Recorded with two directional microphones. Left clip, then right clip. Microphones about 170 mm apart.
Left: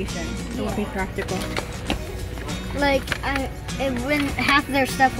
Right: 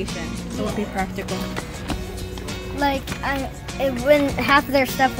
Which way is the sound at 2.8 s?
65° right (ahead or behind).